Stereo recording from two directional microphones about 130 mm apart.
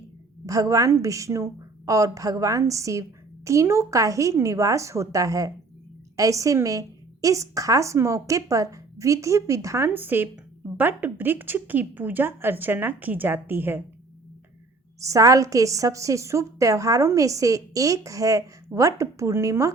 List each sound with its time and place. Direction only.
0.4 s a woman's voice: 25° right (ahead or behind)
15.0 s a woman's voice: 25° right (ahead or behind)